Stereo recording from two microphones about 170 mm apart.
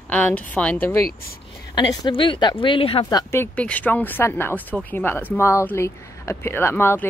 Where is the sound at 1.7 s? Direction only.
25° left (ahead or behind).